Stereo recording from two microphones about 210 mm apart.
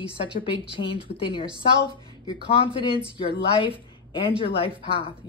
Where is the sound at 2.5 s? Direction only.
25° left (ahead or behind).